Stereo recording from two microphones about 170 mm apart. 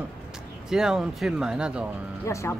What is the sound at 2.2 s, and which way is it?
Speech, 15° left (ahead or behind).